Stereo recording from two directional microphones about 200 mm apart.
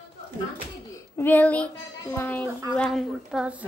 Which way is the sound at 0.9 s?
10° left (ahead or behind).